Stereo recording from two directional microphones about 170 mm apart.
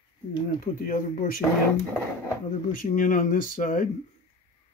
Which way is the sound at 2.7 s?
50° left (ahead or behind).